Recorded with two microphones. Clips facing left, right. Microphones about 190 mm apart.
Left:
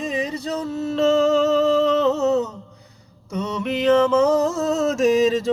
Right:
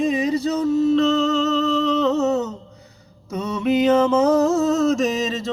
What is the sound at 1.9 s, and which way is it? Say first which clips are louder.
Humming: even; centre (ahead or behind).